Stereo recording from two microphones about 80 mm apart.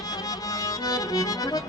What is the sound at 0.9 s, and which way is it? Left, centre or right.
Accordion, left.